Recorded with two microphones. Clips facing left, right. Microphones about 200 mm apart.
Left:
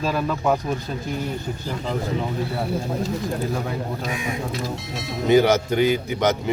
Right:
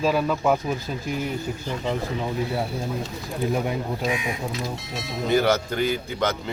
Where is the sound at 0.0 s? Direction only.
5° right (ahead or behind).